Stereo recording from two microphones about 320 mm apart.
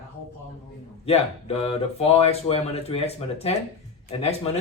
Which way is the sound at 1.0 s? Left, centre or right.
Centre.